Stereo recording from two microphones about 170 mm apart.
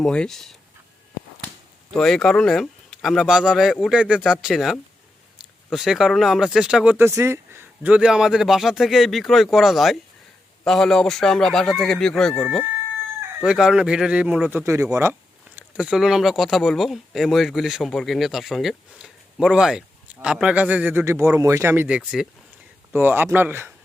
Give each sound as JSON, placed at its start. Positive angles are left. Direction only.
{"t": 0.0, "sound": "speech", "side_deg": 5}
{"t": 1.9, "sound": "speech", "side_deg": 5}
{"t": 13.4, "sound": "speech", "side_deg": -5}
{"t": 14.6, "sound": "a man's voice", "side_deg": -15}
{"t": 15.5, "sound": "a man's voice", "side_deg": -5}